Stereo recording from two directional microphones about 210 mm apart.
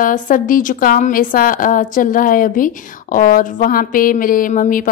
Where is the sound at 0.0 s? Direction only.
40° left (ahead or behind).